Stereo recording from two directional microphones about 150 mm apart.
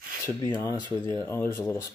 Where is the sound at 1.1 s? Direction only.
15° left (ahead or behind).